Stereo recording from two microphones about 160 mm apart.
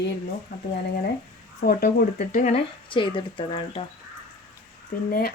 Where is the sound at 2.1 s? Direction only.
45° left (ahead or behind).